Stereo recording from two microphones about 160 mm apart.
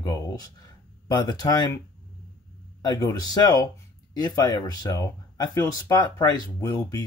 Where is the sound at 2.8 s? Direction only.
25° left (ahead or behind).